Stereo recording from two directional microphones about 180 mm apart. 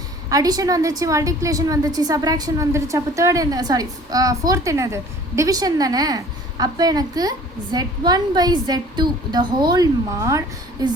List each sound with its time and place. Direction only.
0.3 s a woman's voice: 20° right (ahead or behind)